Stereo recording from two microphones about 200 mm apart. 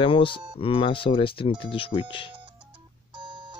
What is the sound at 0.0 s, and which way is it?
Speech, 25° left (ahead or behind).